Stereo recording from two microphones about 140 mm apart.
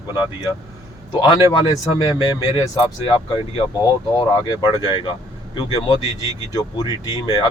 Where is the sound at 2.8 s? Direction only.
35° left (ahead or behind).